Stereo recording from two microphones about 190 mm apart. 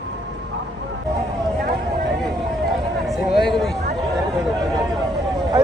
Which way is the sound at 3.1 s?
Centre (ahead or behind).